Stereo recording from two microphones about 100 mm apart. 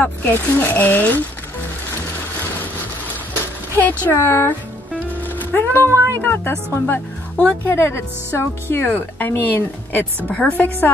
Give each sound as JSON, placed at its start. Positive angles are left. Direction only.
{"t": 0.0, "sound": "speech", "side_deg": 20}
{"t": 4.2, "sound": "speech", "side_deg": 20}
{"t": 5.4, "sound": "music", "side_deg": 20}
{"t": 5.9, "sound": "speech", "side_deg": -30}
{"t": 6.2, "sound": "speech", "side_deg": 20}